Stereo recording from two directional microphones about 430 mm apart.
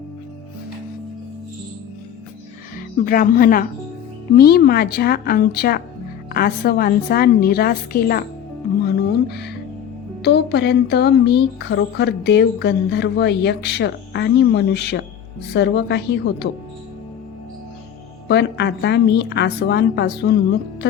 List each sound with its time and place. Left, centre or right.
2.7 s speech: centre
9.0 s music: left
10.2 s speech: left
18.3 s speech: left